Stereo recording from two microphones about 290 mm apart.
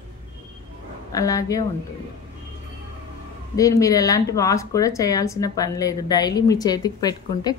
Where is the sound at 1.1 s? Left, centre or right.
Centre.